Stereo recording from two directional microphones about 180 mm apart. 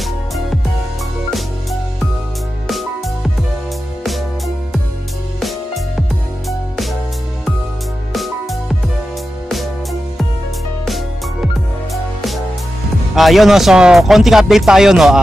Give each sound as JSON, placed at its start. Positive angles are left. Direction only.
{"t": 1.3, "sound": "music", "side_deg": 0}
{"t": 8.1, "sound": "music", "side_deg": 0}
{"t": 13.1, "sound": "speech", "side_deg": 0}